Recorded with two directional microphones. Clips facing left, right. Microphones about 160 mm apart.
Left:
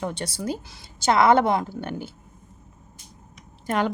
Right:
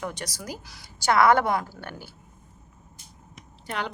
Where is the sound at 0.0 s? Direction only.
30° left (ahead or behind).